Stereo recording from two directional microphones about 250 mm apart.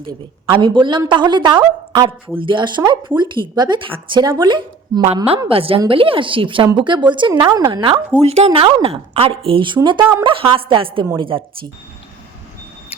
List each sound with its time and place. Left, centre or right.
0.5 s a woman's voice: centre
10.3 s speech: right